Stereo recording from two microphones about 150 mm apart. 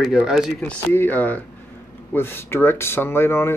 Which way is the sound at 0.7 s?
15° left (ahead or behind).